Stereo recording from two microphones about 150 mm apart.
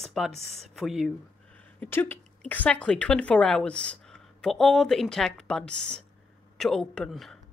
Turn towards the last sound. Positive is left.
turn(degrees=0)  # may be behind; listen again after turning